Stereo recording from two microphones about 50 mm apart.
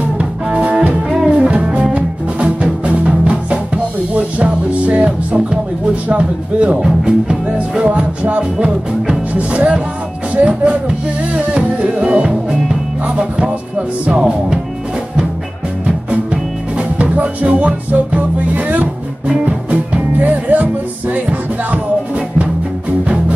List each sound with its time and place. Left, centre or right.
0.2 s music: right
6.0 s speech: right
16.1 s music: right
23.0 s music: right